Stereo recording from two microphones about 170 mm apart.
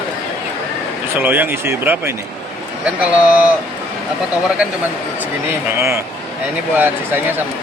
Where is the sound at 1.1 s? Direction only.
10° right (ahead or behind).